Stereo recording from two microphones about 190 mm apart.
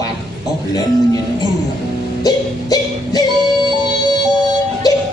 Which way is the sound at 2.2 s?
20° left (ahead or behind).